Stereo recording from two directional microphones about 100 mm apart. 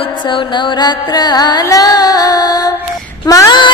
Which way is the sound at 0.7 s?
45° left (ahead or behind).